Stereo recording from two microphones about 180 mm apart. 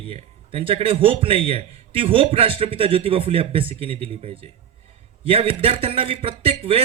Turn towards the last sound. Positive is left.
turn(degrees=-30)  # may be behind; listen again after turning